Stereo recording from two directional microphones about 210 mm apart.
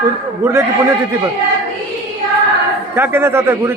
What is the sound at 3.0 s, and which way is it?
Speech, 10° right (ahead or behind).